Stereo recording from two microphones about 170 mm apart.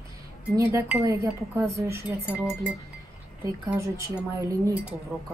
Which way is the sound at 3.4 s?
20° right (ahead or behind).